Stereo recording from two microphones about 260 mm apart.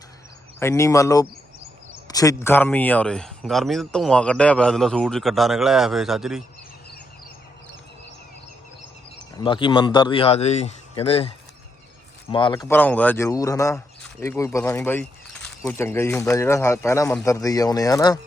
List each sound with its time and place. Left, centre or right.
0.6 s a man's voice: centre
9.4 s speech: centre
12.3 s speech: centre